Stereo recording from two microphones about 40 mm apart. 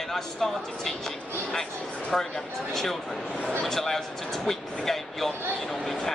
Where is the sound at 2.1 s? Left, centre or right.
Centre.